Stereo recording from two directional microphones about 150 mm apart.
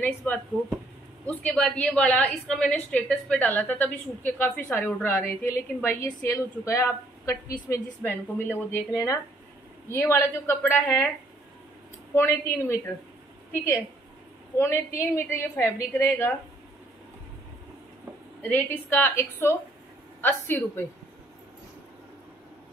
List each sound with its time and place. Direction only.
0.0 s a woman's voice: 10° left (ahead or behind)
12.2 s a woman's voice: 15° left (ahead or behind)
14.6 s a woman's voice: 15° left (ahead or behind)
18.4 s a woman's voice: 10° left (ahead or behind)